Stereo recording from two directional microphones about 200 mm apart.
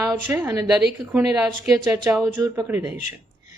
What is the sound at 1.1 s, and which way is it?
A woman's voice, centre (ahead or behind).